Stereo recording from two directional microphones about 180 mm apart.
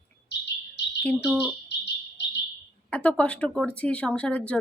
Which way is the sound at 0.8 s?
70° left (ahead or behind).